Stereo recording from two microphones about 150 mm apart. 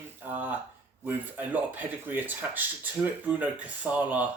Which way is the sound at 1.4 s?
10° right (ahead or behind).